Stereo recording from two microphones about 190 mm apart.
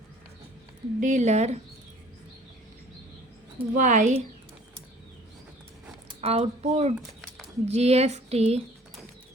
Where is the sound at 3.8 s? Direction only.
40° right (ahead or behind).